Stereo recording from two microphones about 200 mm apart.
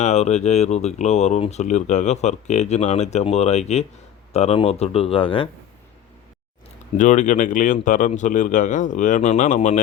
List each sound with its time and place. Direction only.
0.0 s speech: 35° left (ahead or behind)
6.9 s speech: 40° left (ahead or behind)